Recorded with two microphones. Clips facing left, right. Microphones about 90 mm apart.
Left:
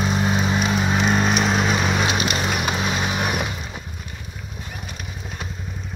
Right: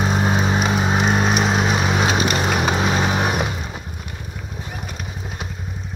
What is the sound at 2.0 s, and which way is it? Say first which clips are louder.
Vehicle: right 3 dB; 30° right (ahead or behind).